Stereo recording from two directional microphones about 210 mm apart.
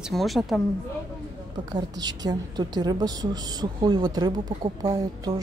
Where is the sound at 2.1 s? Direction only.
20° right (ahead or behind).